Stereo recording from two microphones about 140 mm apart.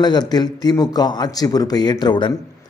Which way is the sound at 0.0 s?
30° left (ahead or behind).